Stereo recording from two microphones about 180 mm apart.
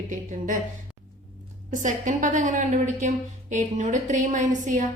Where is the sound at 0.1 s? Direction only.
45° right (ahead or behind).